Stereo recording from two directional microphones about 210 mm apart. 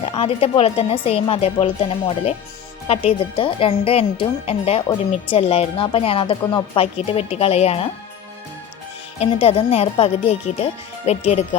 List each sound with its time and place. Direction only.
0.2 s speech: 30° left (ahead or behind)
9.2 s speech: 30° left (ahead or behind)